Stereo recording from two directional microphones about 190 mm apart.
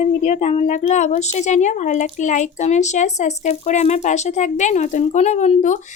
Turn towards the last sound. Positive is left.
turn(degrees=40)  # may be behind; listen again after turning